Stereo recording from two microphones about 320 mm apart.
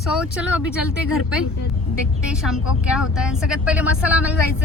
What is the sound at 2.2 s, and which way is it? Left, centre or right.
Speech, centre.